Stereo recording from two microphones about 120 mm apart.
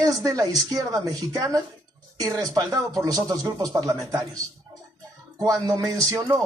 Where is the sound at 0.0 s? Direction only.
30° right (ahead or behind).